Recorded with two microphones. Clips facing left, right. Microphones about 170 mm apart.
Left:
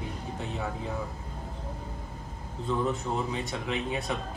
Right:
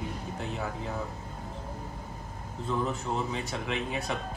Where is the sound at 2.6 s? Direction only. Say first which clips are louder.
Left 2 dB; centre (ahead or behind).